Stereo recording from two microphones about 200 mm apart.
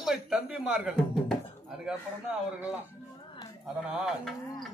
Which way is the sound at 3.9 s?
Centre (ahead or behind).